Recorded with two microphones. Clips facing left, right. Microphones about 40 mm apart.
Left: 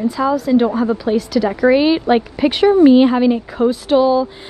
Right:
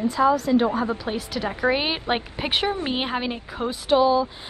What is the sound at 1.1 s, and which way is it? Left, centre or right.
A woman's voice, right.